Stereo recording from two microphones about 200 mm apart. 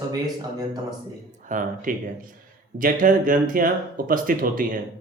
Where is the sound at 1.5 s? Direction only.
40° right (ahead or behind).